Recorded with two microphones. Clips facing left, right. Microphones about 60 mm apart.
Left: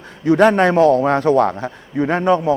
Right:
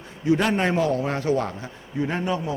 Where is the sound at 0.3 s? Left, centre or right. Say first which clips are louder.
Left 9 dB; left.